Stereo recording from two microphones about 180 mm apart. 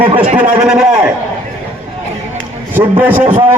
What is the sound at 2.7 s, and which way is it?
Speech, 10° right (ahead or behind).